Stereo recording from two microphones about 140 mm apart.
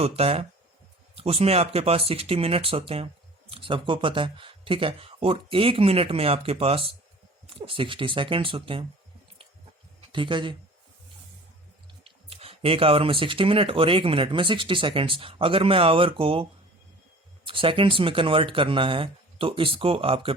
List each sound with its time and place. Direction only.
0.0 s speech: 45° right (ahead or behind)
10.1 s speech: 35° right (ahead or behind)
12.0 s speech: 45° right (ahead or behind)